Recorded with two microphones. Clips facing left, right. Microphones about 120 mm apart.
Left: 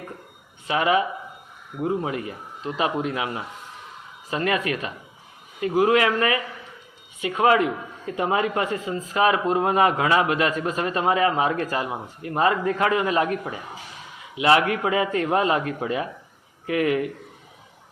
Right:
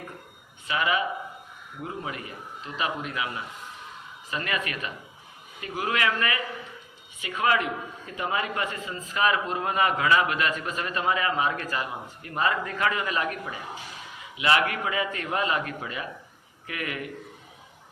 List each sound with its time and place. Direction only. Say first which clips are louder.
0.7 s a man's voice: left 5 dB; 35° left (ahead or behind)